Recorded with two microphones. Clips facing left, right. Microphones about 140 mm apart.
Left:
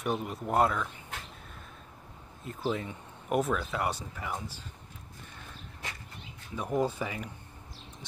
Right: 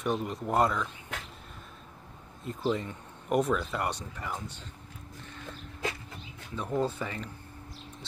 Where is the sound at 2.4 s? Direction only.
Centre (ahead or behind).